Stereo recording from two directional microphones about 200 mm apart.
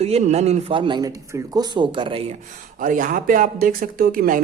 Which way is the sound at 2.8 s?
40° right (ahead or behind).